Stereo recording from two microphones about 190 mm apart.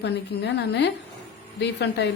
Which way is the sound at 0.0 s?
60° left (ahead or behind).